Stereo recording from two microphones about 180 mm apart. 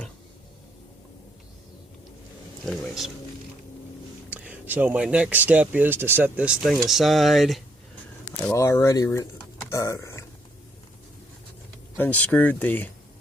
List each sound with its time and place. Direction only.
2.6 s speech: centre (ahead or behind)
4.3 s speech: 10° right (ahead or behind)
8.5 s speech: 15° left (ahead or behind)
9.6 s a sound: 15° left (ahead or behind)
11.9 s speech: 10° left (ahead or behind)